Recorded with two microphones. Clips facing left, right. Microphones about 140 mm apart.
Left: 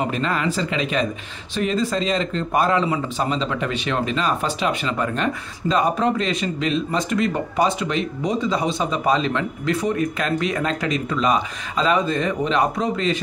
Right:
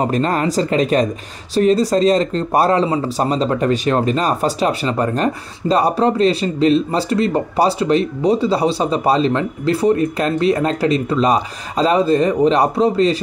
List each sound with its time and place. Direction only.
0.0 s speech: 40° right (ahead or behind)